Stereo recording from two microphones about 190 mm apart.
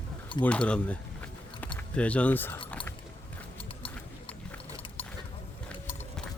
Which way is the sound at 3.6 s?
30° left (ahead or behind).